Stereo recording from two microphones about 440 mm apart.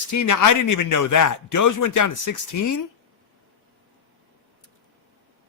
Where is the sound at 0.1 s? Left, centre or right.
Left.